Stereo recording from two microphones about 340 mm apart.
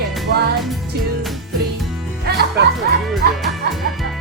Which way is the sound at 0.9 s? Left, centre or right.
Right.